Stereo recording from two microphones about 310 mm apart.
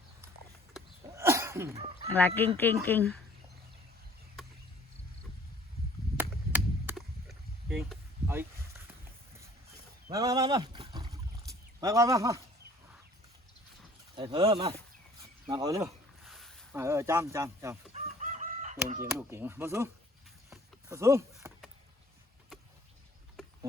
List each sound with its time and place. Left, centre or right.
0.7 s a sound: centre
2.1 s speech: centre
6.1 s chop: centre
10.1 s speech: centre
14.2 s speech: centre
15.2 s cricket: centre
16.2 s a sound: centre
16.8 s speech: centre
17.9 s chicken: right
19.3 s speech: centre
20.5 s a sound: centre